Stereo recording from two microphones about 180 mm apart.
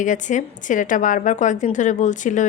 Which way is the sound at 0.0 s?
45° left (ahead or behind).